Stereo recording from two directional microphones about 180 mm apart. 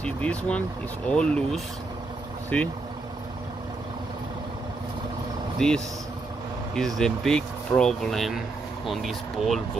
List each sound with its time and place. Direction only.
0.0 s speech: 5° left (ahead or behind)
5.6 s speech: 5° left (ahead or behind)
7.0 s speech: 5° left (ahead or behind)